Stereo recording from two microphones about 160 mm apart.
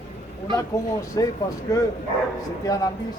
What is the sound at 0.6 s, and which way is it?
Speech, 20° left (ahead or behind).